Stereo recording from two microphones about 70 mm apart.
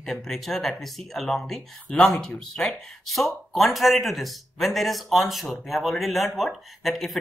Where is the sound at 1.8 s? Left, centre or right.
Centre.